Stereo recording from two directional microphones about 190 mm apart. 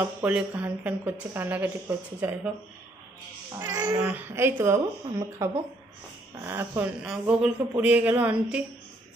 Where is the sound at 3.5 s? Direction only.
20° right (ahead or behind).